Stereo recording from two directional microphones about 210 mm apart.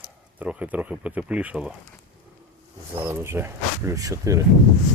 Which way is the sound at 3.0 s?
10° right (ahead or behind).